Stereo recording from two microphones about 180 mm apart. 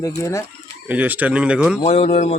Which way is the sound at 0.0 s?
15° left (ahead or behind).